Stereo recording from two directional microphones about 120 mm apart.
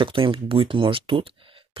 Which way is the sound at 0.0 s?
45° right (ahead or behind).